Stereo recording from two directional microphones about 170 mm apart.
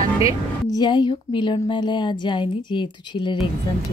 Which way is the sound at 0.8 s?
30° left (ahead or behind).